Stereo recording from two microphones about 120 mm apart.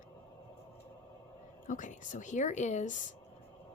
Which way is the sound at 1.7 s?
90° left.